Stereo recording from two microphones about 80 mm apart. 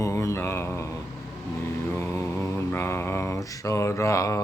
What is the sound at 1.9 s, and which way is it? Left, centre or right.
Mantra, left.